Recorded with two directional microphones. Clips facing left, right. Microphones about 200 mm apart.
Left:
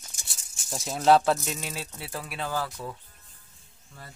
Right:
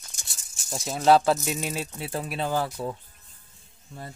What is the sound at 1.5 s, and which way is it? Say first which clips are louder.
Speech: right 5 dB; 15° right (ahead or behind).